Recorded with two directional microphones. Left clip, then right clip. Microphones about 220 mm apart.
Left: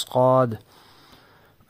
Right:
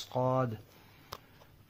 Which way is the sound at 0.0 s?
45° left (ahead or behind).